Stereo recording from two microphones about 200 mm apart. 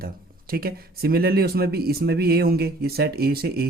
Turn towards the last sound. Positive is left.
turn(degrees=-50)  # may be behind; listen again after turning